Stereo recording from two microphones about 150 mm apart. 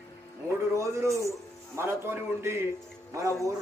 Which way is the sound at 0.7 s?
20° right (ahead or behind).